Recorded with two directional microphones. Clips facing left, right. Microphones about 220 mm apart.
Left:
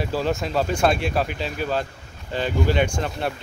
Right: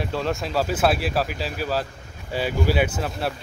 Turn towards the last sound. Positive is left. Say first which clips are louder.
# left 1 dB
turn(degrees=-5)  # may be behind; listen again after turning